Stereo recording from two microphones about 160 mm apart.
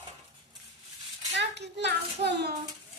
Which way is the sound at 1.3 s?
90° right.